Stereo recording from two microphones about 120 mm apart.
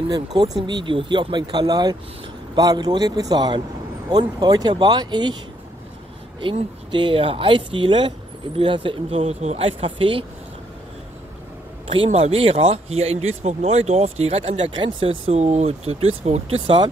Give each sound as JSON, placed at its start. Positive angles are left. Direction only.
{"t": 0.1, "sound": "speech", "side_deg": -35}
{"t": 6.9, "sound": "speech", "side_deg": -45}
{"t": 11.9, "sound": "speech", "side_deg": -55}